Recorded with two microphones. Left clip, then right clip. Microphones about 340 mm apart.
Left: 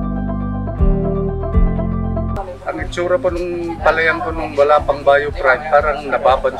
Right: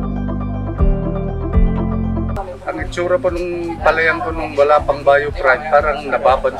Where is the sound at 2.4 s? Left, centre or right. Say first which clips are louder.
Even; centre.